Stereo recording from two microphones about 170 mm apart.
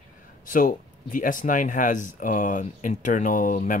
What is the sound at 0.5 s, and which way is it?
Speech, 50° left (ahead or behind).